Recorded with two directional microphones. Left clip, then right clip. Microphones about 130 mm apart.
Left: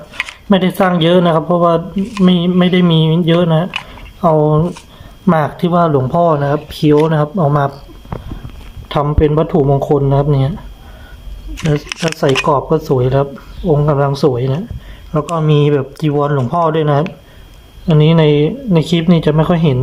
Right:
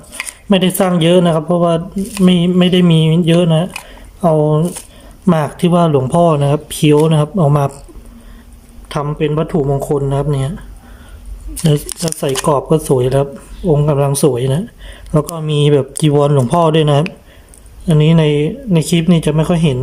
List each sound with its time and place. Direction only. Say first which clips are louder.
0.4 s speech: left 1 dB; 15° right (ahead or behind)
8.9 s speech: left 4 dB; 10° right (ahead or behind)
11.7 s speech: left 2 dB; 25° right (ahead or behind)
17.8 s speech: left 2 dB; 15° right (ahead or behind)